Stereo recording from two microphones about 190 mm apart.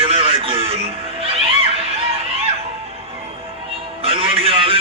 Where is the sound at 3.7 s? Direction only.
30° right (ahead or behind).